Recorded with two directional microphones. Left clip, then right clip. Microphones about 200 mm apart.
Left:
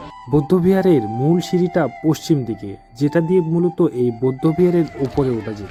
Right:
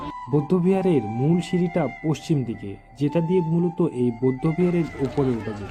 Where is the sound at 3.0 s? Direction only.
30° left (ahead or behind).